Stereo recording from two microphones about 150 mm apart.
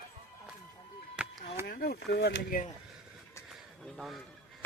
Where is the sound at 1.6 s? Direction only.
90° left.